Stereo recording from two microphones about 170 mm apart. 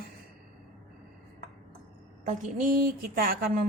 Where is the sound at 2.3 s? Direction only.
55° right (ahead or behind).